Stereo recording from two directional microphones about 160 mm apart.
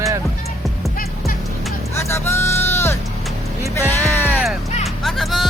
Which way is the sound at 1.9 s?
15° left (ahead or behind).